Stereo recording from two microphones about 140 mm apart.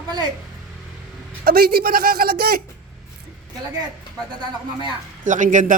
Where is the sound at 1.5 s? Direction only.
90° right.